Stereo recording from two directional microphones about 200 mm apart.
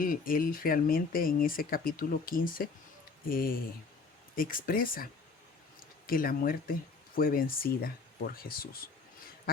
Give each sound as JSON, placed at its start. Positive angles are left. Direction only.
{"t": 0.0, "sound": "speech", "side_deg": 45}
{"t": 6.1, "sound": "speech", "side_deg": 45}